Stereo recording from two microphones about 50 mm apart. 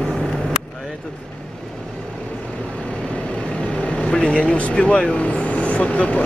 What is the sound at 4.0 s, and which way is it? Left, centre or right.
Speech, left.